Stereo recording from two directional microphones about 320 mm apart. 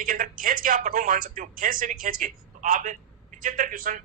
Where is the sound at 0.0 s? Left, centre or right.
Right.